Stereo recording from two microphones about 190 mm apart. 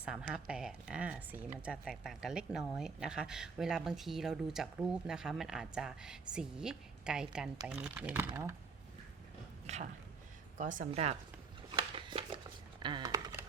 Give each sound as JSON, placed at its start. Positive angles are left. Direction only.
{"t": 0.0, "sound": "speech", "side_deg": -5}
{"t": 9.6, "sound": "speech", "side_deg": -35}
{"t": 11.8, "sound": "a sound", "side_deg": -25}
{"t": 12.8, "sound": "computer keyboard", "side_deg": -20}